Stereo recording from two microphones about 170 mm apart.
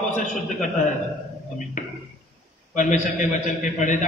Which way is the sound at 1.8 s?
45° left (ahead or behind).